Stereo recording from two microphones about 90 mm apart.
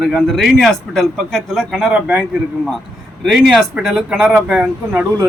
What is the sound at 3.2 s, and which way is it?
Speech, 5° right (ahead or behind).